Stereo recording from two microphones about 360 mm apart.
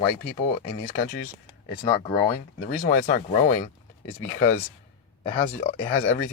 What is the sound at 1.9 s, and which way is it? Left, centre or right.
Speech, centre.